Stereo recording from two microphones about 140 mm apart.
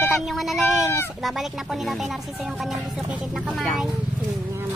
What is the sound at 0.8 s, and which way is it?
Speech, 20° left (ahead or behind).